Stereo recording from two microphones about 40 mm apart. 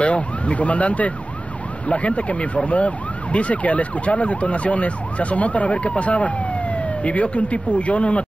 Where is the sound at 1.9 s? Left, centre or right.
Left.